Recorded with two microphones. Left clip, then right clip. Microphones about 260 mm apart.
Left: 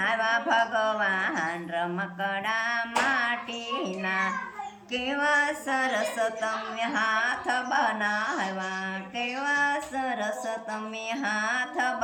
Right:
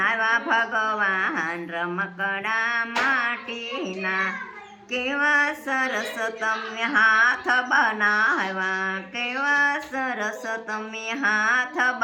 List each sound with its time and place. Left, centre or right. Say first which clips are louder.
0.0 s speech: right 4 dB; centre
4.0 s speech: right 4 dB; centre